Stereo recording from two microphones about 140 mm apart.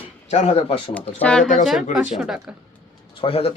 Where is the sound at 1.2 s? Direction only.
5° left (ahead or behind).